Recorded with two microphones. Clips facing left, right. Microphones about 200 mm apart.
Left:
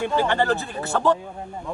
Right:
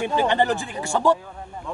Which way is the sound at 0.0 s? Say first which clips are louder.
Right 1 dB; 15° right (ahead or behind).